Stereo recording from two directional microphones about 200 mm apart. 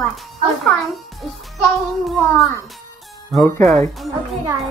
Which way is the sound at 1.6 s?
Centre (ahead or behind).